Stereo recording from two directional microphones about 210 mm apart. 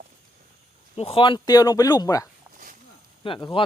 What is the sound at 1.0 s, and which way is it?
Speech, 25° left (ahead or behind).